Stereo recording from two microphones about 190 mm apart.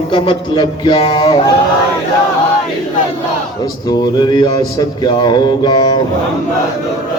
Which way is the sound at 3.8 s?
25° left (ahead or behind).